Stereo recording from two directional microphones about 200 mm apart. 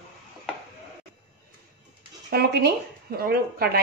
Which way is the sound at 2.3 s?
55° right (ahead or behind).